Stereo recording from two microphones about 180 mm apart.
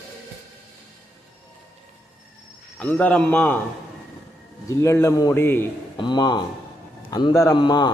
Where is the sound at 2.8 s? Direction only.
10° left (ahead or behind).